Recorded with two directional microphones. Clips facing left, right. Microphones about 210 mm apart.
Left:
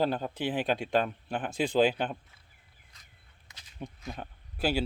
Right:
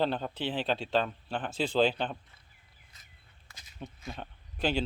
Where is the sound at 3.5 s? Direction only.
20° left (ahead or behind).